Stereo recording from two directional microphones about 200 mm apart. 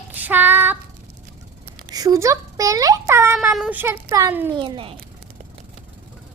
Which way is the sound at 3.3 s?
Centre (ahead or behind).